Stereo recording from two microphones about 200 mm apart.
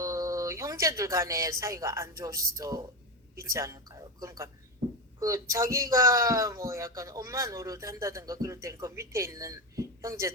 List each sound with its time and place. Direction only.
0.0 s speech: 15° right (ahead or behind)
3.5 s a sound: 15° right (ahead or behind)
5.2 s speech: 15° right (ahead or behind)